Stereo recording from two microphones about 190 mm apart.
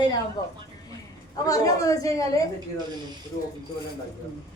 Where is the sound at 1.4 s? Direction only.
15° left (ahead or behind).